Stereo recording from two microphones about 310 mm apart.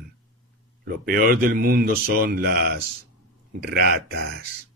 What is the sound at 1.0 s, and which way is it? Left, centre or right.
Speech, right.